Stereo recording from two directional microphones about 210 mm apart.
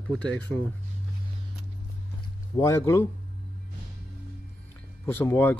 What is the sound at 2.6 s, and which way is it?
Speech, 15° left (ahead or behind).